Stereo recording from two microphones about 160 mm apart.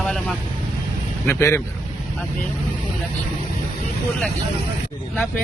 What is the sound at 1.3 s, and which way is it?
Speech, 15° left (ahead or behind).